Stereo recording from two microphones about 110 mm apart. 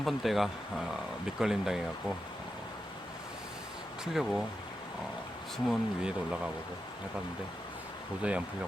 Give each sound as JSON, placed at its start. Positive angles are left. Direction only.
{"t": 0.0, "sound": "speech", "side_deg": 0}
{"t": 4.0, "sound": "speech", "side_deg": 0}
{"t": 5.6, "sound": "speech", "side_deg": -5}
{"t": 8.2, "sound": "speech", "side_deg": -10}